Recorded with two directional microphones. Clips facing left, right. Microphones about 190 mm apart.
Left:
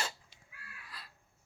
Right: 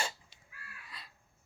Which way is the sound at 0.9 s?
Centre (ahead or behind).